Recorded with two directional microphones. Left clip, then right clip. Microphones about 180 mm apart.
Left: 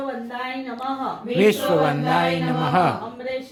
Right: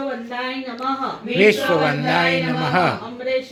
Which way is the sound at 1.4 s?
15° left (ahead or behind).